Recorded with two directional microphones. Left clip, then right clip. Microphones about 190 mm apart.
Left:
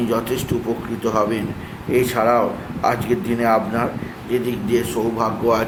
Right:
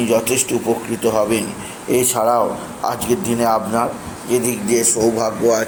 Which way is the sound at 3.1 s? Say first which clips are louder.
Right 2 dB; centre (ahead or behind).